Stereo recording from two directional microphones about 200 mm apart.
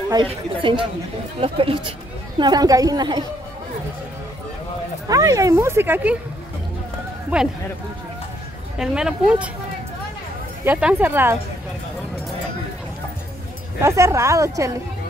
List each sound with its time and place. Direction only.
0.1 s a woman's voice: 25° right (ahead or behind)
5.0 s speech: 15° right (ahead or behind)
7.3 s speech: 5° right (ahead or behind)
8.7 s speech: 5° right (ahead or behind)
10.6 s speech: 10° right (ahead or behind)
13.7 s speech: 15° right (ahead or behind)